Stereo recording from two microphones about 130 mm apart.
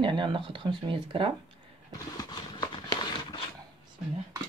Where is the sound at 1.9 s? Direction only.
30° left (ahead or behind).